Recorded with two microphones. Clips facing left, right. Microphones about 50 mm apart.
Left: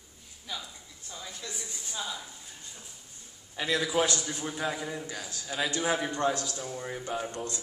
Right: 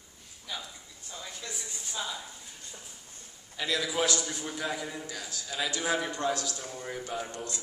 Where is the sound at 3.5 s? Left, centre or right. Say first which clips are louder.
Left 3 dB; left.